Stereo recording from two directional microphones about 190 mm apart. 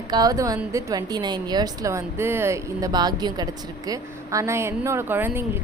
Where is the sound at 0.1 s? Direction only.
20° right (ahead or behind).